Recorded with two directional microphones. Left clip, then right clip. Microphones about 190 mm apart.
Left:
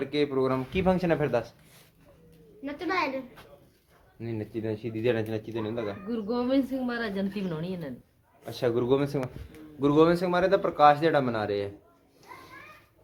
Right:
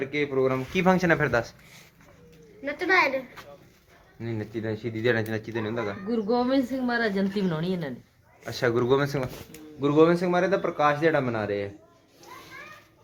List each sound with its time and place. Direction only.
0.0 s speech: 5° left (ahead or behind)
0.7 s a man's voice: 5° right (ahead or behind)
2.6 s a child's voice: 45° left (ahead or behind)
4.2 s a man's voice: 10° left (ahead or behind)
6.1 s a woman's voice: 20° right (ahead or behind)
8.4 s a man's voice: centre (ahead or behind)